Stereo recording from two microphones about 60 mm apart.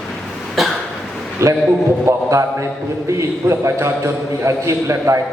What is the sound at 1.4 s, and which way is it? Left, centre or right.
A man's voice, right.